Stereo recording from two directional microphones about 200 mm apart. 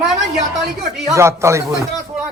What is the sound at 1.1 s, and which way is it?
Speech, 15° right (ahead or behind).